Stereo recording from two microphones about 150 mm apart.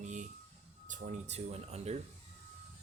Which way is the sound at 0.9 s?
50° right (ahead or behind).